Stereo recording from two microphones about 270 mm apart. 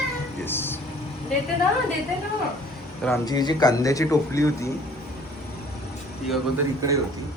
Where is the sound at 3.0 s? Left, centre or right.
Centre.